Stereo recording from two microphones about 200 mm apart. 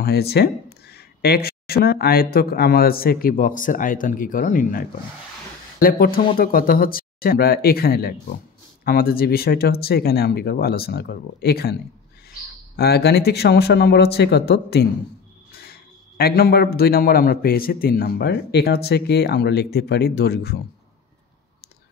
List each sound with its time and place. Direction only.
0.0 s a man's voice: 55° left (ahead or behind)
12.7 s a man's voice: 55° left (ahead or behind)